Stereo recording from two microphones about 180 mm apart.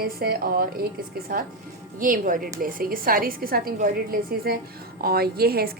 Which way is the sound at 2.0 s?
50° right (ahead or behind).